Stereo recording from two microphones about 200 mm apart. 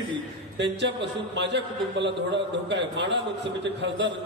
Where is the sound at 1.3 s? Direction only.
60° right (ahead or behind).